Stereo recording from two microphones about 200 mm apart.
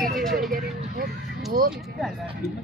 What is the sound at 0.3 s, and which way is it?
Vehicle, 45° right (ahead or behind).